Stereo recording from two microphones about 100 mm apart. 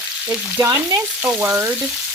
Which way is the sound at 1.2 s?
20° right (ahead or behind).